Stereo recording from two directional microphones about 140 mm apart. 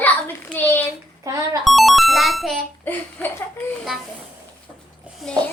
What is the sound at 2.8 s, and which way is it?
Speech, 10° left (ahead or behind).